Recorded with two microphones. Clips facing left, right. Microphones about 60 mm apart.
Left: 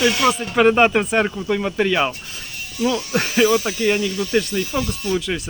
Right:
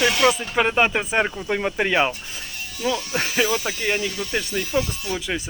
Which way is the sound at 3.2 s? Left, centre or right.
Centre.